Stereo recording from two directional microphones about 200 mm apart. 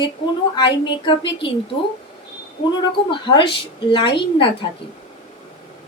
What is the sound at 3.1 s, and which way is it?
A woman's voice, 25° left (ahead or behind).